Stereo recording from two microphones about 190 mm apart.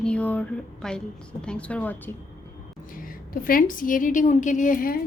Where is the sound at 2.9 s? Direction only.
50° left (ahead or behind).